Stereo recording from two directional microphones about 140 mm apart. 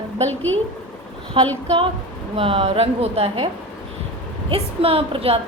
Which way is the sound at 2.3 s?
40° right (ahead or behind).